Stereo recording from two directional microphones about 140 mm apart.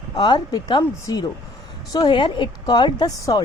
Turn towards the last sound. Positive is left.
turn(degrees=25)  # may be behind; listen again after turning